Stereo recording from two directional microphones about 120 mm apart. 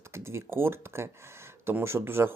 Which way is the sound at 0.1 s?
20° right (ahead or behind).